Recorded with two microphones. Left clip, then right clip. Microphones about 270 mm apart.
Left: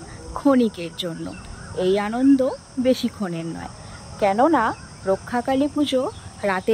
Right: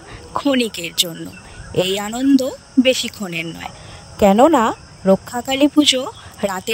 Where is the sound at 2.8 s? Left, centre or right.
Right.